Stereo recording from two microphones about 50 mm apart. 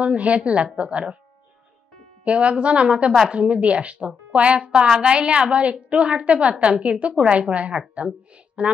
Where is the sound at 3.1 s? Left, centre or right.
Centre.